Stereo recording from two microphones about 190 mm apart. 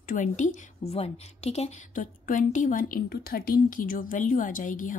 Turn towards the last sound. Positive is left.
turn(degrees=45)  # may be behind; listen again after turning